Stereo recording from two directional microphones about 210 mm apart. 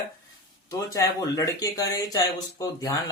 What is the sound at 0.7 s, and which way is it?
Speech, 15° left (ahead or behind).